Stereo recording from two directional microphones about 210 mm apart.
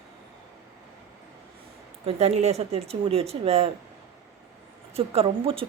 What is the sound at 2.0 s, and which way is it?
Speech, 30° right (ahead or behind).